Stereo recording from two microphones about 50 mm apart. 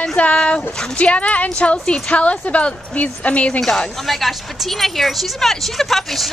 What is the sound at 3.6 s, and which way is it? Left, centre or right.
A woman's voice, centre.